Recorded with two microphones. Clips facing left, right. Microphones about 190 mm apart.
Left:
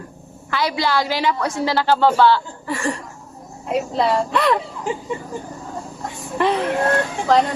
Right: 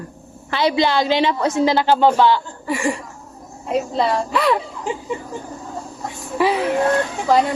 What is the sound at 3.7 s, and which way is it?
A woman's voice, centre (ahead or behind).